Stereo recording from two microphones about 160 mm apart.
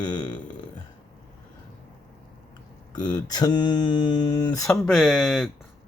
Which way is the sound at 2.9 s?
25° left (ahead or behind).